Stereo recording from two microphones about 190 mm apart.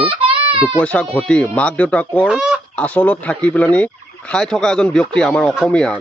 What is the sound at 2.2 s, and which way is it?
Chicken, 5° right (ahead or behind).